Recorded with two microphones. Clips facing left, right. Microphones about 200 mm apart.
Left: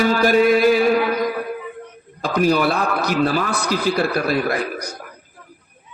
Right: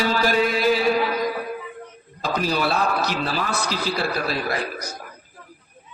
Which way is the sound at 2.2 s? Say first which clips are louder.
Left 6 dB; 50° left (ahead or behind).